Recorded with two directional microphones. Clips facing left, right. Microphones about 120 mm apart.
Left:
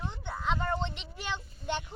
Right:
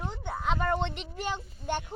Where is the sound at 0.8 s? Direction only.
50° right (ahead or behind).